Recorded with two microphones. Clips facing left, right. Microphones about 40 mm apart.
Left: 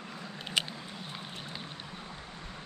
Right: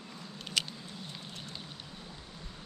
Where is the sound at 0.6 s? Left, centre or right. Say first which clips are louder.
Left 2 dB; left.